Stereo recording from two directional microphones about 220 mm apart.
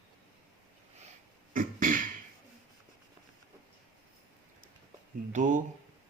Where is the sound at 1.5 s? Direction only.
35° right (ahead or behind).